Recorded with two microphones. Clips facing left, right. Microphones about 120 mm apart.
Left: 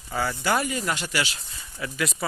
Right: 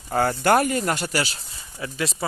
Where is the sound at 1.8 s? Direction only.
30° right (ahead or behind).